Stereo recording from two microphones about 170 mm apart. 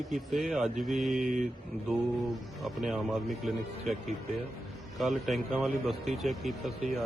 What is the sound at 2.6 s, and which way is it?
A man's voice, centre (ahead or behind).